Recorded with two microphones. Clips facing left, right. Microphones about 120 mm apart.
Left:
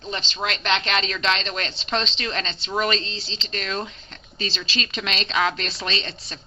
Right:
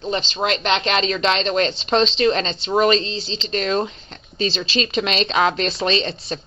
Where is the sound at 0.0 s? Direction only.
20° right (ahead or behind).